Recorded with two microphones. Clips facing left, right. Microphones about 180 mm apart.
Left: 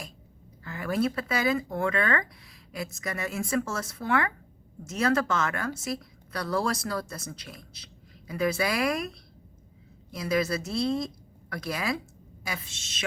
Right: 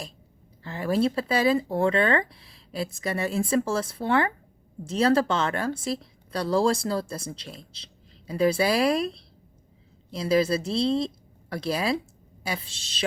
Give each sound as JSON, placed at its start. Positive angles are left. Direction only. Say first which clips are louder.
{"t": 0.6, "sound": "a woman's voice", "louder": "right 3 dB", "side_deg": -30}